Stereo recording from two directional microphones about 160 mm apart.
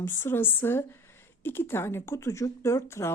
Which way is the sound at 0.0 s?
15° left (ahead or behind).